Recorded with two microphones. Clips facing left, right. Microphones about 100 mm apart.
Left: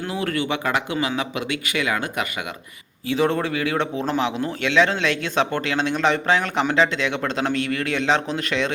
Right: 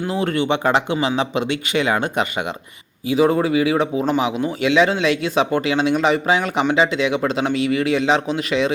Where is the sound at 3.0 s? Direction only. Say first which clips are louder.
Right 5 dB; 10° right (ahead or behind).